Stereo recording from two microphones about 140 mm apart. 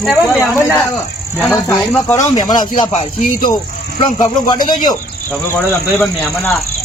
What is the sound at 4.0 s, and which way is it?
Speech, 30° left (ahead or behind).